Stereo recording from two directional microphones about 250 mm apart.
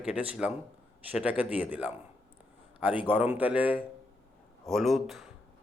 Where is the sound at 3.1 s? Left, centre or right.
Centre.